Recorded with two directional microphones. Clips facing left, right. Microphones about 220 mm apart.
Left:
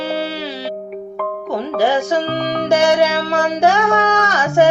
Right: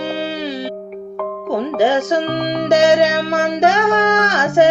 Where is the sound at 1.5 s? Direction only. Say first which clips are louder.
Right 2 dB; 20° right (ahead or behind).